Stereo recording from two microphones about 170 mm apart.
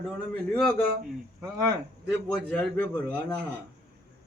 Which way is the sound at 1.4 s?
20° right (ahead or behind).